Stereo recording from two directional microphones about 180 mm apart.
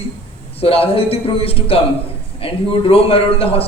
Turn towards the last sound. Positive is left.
turn(degrees=30)  # may be behind; listen again after turning